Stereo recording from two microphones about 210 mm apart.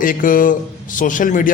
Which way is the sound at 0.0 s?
40° left (ahead or behind).